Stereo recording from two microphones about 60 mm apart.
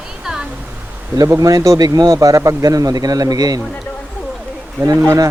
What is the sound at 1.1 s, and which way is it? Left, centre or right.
A man's voice, right.